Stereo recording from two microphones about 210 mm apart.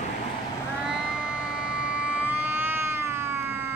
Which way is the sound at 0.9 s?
5° right (ahead or behind).